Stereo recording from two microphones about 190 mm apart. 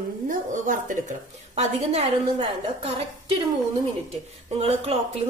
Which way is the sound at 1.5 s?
35° right (ahead or behind).